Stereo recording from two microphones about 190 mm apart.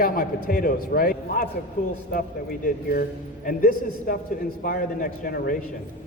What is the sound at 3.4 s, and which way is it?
Speech, 50° left (ahead or behind).